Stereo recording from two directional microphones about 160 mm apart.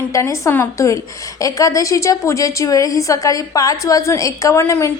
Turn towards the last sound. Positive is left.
turn(degrees=15)  # may be behind; listen again after turning